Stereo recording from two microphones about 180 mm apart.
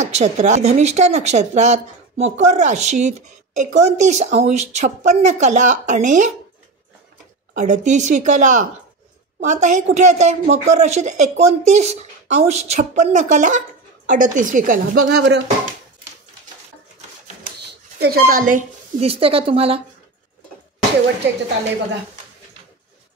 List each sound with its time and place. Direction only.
0.0 s speech: 40° right (ahead or behind)
7.5 s a woman's voice: 45° right (ahead or behind); by 15.4 s 65° right (ahead or behind)
17.9 s speech: 60° right (ahead or behind)
19.0 s speech: 30° right (ahead or behind)
21.2 s a woman's voice: 75° right (ahead or behind)